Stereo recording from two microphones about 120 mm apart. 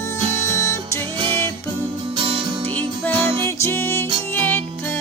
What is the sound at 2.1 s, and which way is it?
Music, 45° right (ahead or behind).